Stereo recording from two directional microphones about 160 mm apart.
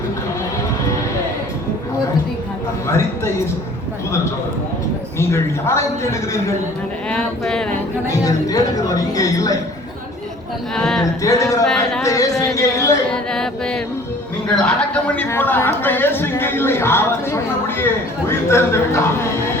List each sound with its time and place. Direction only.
5.3 s speech: 15° left (ahead or behind)
7.1 s speech: 5° left (ahead or behind)
8.1 s speech: 20° left (ahead or behind)
10.8 s speech: 5° left (ahead or behind)
11.2 s speech: 20° left (ahead or behind)
11.6 s speech: 5° left (ahead or behind)
12.0 s speech: 20° left (ahead or behind)
13.1 s music: 5° left (ahead or behind)
14.4 s speech: 5° left (ahead or behind)